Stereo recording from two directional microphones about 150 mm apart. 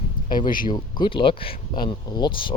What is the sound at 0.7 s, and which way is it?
Speech, 30° left (ahead or behind).